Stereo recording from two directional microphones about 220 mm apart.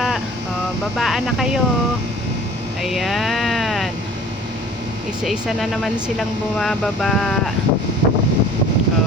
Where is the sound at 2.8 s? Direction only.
Centre (ahead or behind).